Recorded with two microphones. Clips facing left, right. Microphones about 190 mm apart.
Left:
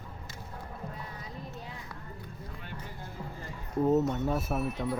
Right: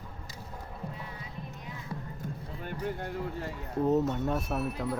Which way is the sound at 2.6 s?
65° right (ahead or behind).